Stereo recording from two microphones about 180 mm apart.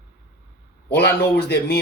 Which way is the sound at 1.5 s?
60° left (ahead or behind).